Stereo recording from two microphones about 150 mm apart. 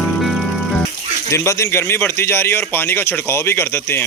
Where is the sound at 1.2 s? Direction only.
20° left (ahead or behind).